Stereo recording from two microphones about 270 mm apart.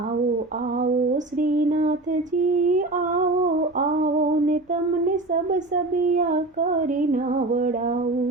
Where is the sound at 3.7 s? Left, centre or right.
Right.